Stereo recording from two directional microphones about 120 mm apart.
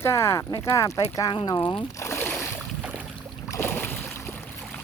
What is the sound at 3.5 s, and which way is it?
Boat, 20° left (ahead or behind).